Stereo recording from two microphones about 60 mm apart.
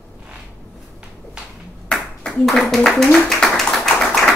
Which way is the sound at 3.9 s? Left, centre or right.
Centre.